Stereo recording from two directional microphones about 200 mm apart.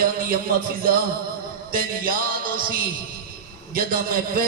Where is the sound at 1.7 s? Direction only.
45° right (ahead or behind).